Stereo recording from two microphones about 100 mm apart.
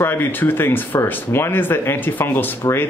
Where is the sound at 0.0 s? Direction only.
20° left (ahead or behind).